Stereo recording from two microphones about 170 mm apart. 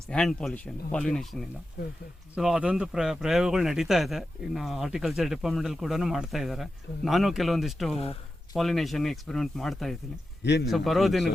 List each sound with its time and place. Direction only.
0.1 s speech: 5° left (ahead or behind)
7.9 s speech: 35° left (ahead or behind)
8.5 s speech: centre (ahead or behind)
10.4 s speech: 90° left
10.7 s speech: centre (ahead or behind)